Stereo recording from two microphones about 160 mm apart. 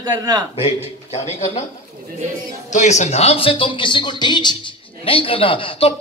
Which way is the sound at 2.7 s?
45° left (ahead or behind).